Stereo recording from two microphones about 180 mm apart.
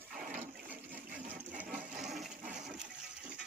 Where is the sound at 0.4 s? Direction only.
10° right (ahead or behind).